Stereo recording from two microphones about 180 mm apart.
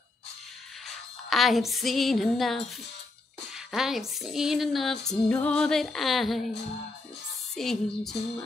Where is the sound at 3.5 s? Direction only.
5° right (ahead or behind).